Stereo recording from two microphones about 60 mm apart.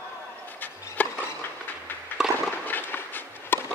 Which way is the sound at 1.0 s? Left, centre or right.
Left.